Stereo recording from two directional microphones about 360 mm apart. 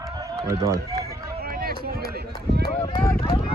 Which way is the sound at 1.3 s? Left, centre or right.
Right.